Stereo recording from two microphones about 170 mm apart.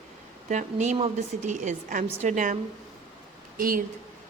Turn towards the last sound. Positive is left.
turn(degrees=-55)  # may be behind; listen again after turning